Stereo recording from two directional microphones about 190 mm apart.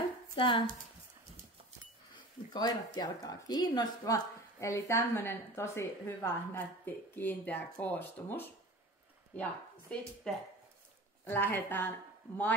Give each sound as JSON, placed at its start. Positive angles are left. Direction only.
{"t": 0.4, "sound": "speech", "side_deg": 25}
{"t": 2.1, "sound": "speech", "side_deg": 20}